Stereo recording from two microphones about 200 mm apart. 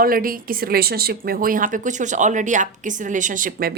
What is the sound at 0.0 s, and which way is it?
A woman's voice, 45° right (ahead or behind).